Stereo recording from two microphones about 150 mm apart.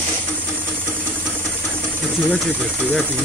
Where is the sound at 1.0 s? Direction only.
10° left (ahead or behind).